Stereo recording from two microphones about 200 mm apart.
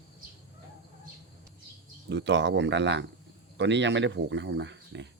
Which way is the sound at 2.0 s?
60° right (ahead or behind).